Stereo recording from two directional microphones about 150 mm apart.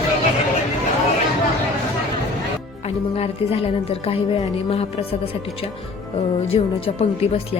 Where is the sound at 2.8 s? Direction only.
40° left (ahead or behind).